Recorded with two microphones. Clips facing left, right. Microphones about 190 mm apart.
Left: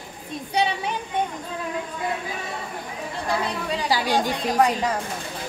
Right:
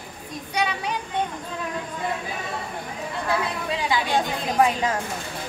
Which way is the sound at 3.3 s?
Centre (ahead or behind).